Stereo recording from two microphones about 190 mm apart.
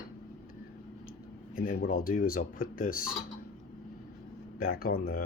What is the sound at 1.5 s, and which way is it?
Speech, 50° left (ahead or behind).